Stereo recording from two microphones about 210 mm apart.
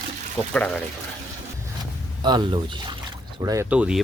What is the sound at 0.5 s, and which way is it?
Speech, 5° left (ahead or behind).